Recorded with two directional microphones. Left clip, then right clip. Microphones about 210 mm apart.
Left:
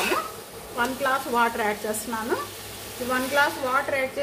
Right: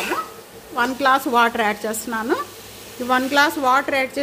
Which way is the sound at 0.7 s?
55° right (ahead or behind).